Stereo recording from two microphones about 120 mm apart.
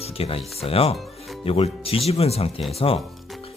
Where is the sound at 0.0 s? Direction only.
55° left (ahead or behind).